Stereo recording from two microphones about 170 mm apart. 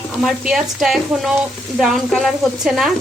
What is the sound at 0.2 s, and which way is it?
Sizzle, centre (ahead or behind).